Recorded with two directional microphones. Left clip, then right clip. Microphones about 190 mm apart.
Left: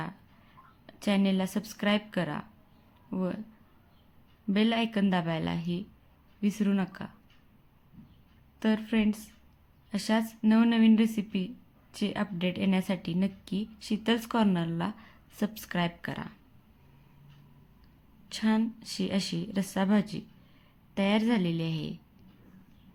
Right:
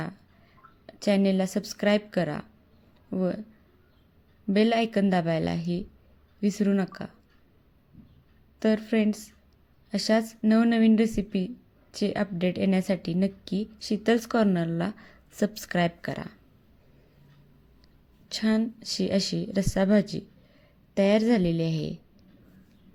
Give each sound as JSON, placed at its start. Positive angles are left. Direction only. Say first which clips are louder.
{"t": 0.9, "sound": "a woman's voice", "louder": "right 5 dB", "side_deg": -15}
{"t": 4.4, "sound": "a woman's voice", "louder": "right 5 dB", "side_deg": -20}
{"t": 8.5, "sound": "a woman's voice", "louder": "right 5 dB", "side_deg": -15}
{"t": 18.3, "sound": "a woman's voice", "louder": "right 3 dB", "side_deg": -20}